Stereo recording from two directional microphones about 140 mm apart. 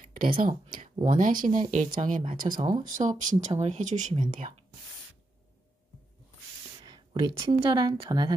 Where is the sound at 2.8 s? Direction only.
65° right (ahead or behind).